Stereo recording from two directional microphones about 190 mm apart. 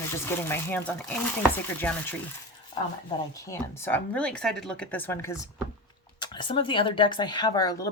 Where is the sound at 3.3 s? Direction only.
15° left (ahead or behind).